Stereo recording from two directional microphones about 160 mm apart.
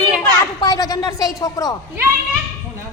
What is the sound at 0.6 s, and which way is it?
Speech, 25° left (ahead or behind).